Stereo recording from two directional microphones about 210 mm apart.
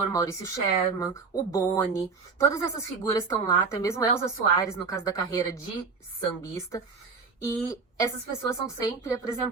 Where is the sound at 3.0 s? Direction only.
15° left (ahead or behind).